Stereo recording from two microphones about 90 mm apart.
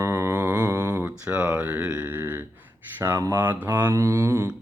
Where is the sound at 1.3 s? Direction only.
15° right (ahead or behind); by 3.3 s 30° right (ahead or behind).